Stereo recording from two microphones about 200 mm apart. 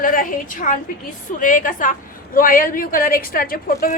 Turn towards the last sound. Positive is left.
turn(degrees=45)  # may be behind; listen again after turning